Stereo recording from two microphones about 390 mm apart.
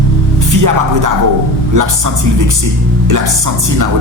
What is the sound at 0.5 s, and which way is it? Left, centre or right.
Speech, right.